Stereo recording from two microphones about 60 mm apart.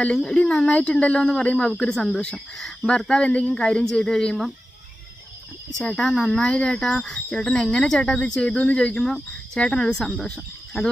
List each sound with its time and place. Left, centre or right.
0.0 s speech: centre
5.8 s speech: centre